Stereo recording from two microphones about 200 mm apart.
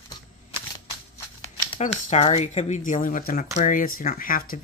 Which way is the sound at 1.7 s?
35° left (ahead or behind).